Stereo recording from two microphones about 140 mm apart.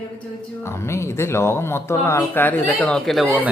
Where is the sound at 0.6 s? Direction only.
20° left (ahead or behind); by 3.3 s centre (ahead or behind).